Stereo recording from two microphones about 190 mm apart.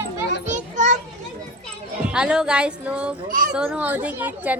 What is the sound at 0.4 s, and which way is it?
Children playing, 40° right (ahead or behind).